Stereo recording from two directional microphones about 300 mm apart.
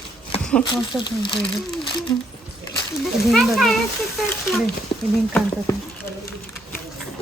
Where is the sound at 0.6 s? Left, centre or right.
Centre.